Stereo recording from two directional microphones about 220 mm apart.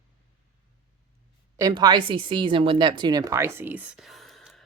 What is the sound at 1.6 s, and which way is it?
Speech, 15° right (ahead or behind).